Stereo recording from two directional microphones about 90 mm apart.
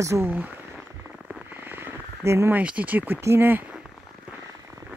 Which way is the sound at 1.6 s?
30° right (ahead or behind).